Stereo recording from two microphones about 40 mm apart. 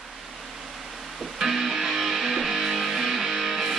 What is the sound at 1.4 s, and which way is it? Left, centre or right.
Music, centre.